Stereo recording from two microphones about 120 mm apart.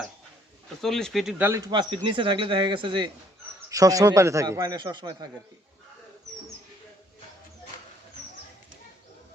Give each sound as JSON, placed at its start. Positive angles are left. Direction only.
{"t": 0.8, "sound": "speech", "side_deg": 5}
{"t": 1.4, "sound": "speech", "side_deg": -20}
{"t": 1.7, "sound": "a man's voice", "side_deg": -40}
{"t": 3.7, "sound": "a man's voice", "side_deg": -30}